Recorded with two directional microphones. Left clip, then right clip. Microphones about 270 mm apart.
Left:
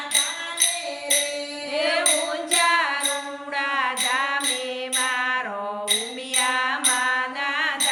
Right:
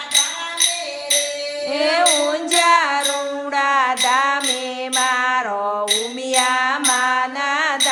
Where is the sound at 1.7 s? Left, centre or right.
Centre.